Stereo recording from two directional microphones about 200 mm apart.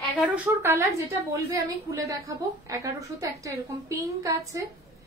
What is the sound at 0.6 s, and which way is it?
A woman's voice, 15° right (ahead or behind).